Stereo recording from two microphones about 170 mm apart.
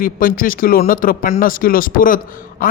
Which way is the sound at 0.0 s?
55° left (ahead or behind).